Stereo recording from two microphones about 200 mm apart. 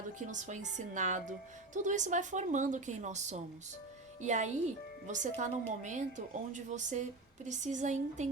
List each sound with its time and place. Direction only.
0.3 s a woman's voice: 40° right (ahead or behind)